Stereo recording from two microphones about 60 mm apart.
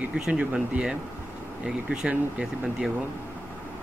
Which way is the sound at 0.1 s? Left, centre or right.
Centre.